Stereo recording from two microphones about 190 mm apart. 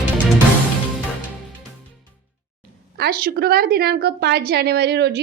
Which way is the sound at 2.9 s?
55° right (ahead or behind).